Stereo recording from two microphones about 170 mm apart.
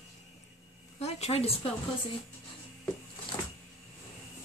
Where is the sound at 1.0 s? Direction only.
40° left (ahead or behind).